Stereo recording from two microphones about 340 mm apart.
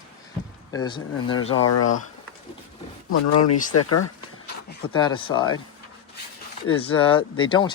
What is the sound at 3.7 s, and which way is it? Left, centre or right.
Speech, left.